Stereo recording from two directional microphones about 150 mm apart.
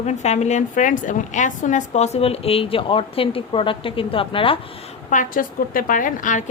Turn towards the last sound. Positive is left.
turn(degrees=60)  # may be behind; listen again after turning